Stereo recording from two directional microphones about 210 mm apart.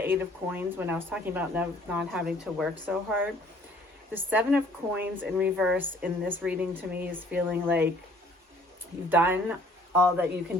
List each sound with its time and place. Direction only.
0.0 s speech: 10° right (ahead or behind)
9.0 s speech: 10° right (ahead or behind)